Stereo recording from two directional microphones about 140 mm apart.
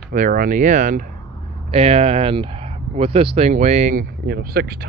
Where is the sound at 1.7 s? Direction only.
45° right (ahead or behind); by 4.8 s 90° right.